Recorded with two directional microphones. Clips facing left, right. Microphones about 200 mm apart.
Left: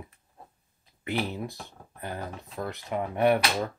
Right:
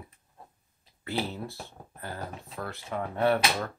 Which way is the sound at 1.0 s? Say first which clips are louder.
Left 2 dB; 15° left (ahead or behind).